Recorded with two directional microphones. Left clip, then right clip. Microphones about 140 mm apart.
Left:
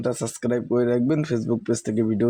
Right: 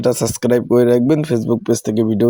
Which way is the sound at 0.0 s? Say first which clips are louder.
Right 10 dB; 30° right (ahead or behind).